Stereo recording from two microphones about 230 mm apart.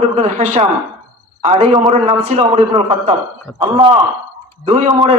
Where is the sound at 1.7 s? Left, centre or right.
Right.